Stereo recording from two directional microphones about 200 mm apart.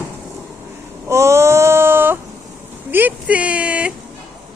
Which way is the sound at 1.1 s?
15° right (ahead or behind).